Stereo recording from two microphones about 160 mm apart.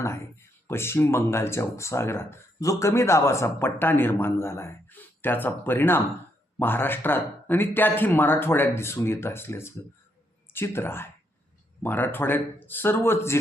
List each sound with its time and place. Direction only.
0.0 s speech: 15° left (ahead or behind)